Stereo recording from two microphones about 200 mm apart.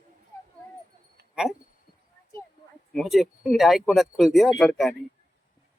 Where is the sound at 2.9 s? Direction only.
Centre (ahead or behind).